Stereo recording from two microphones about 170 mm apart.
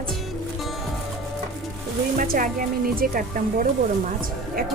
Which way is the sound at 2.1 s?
50° right (ahead or behind).